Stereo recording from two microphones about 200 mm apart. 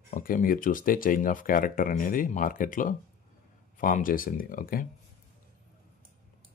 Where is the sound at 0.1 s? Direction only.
45° left (ahead or behind).